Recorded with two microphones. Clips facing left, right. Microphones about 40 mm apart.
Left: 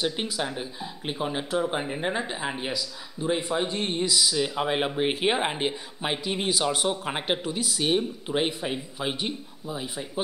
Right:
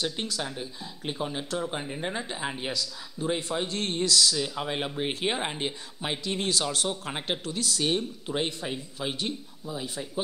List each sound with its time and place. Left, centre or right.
0.0 s speech: centre